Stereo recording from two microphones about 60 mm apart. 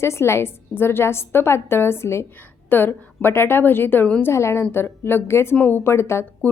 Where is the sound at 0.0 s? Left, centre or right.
Left.